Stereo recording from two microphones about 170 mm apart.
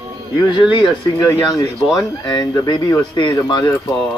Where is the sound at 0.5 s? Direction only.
25° left (ahead or behind).